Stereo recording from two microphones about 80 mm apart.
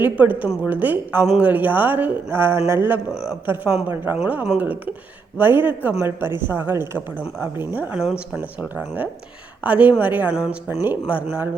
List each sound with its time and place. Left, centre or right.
0.0 s speech: right
7.9 s speech: centre
8.4 s speech: right